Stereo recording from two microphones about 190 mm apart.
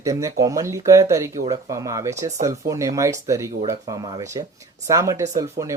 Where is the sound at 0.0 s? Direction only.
15° right (ahead or behind).